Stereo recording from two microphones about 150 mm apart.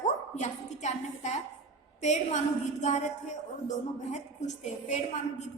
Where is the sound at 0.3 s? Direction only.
50° left (ahead or behind).